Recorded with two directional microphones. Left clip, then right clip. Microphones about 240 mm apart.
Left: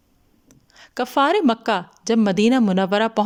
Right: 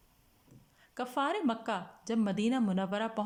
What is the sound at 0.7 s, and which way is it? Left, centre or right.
Speech, left.